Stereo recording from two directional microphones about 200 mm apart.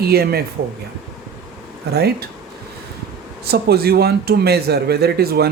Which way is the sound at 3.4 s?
50° right (ahead or behind).